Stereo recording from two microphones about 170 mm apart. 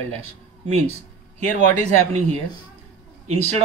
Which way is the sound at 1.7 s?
40° right (ahead or behind).